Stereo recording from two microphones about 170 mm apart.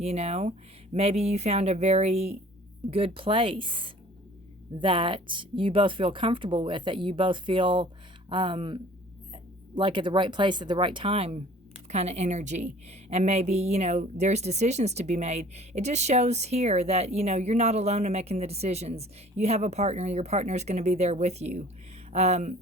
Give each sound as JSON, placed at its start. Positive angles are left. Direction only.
{"t": 0.0, "sound": "a woman's voice", "side_deg": -40}